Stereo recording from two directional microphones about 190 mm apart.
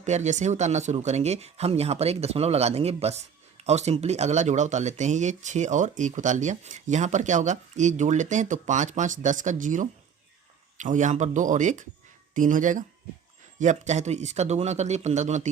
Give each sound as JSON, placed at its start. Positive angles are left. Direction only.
{"t": 0.0, "sound": "speech", "side_deg": -35}